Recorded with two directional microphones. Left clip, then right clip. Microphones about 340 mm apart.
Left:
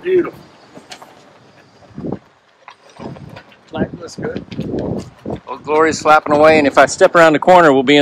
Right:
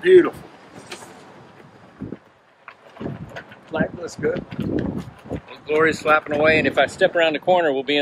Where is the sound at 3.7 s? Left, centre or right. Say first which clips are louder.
Left 1 dB; right.